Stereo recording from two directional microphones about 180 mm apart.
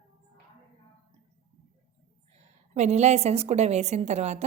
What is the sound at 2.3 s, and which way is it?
A woman's voice, 40° right (ahead or behind).